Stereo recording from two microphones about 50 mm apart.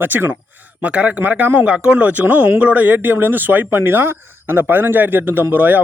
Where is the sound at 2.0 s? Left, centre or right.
Right.